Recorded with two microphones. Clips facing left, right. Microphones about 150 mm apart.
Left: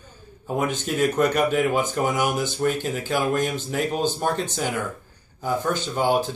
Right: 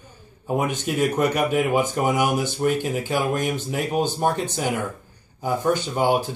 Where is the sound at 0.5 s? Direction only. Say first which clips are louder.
Right 1 dB; 15° right (ahead or behind).